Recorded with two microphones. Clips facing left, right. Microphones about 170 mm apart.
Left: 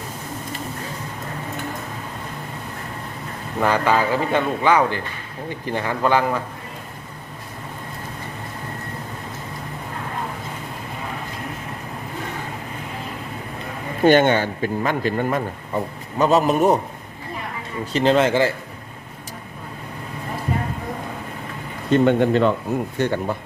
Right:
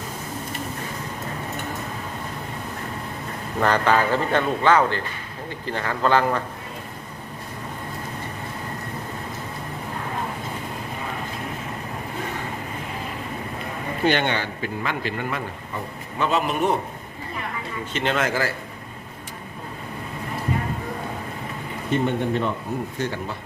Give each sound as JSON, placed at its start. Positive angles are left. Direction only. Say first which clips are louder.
{"t": 3.6, "sound": "speech", "louder": "left 1 dB", "side_deg": 10}
{"t": 14.0, "sound": "a man's voice", "louder": "left 8 dB", "side_deg": 45}
{"t": 17.9, "sound": "speech", "louder": "left 7 dB", "side_deg": 35}
{"t": 21.9, "sound": "speech", "louder": "left 7 dB", "side_deg": 90}
{"t": 23.0, "sound": "speech", "louder": "left 8 dB", "side_deg": 60}